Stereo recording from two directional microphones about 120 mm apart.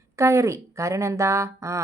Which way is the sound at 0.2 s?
25° right (ahead or behind).